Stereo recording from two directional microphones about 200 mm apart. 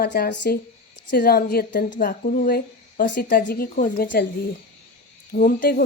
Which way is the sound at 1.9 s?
40° left (ahead or behind).